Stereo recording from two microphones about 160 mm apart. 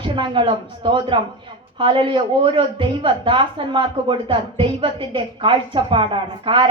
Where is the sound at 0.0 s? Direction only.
30° right (ahead or behind).